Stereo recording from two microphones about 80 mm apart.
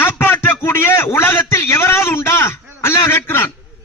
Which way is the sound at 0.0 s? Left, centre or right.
Left.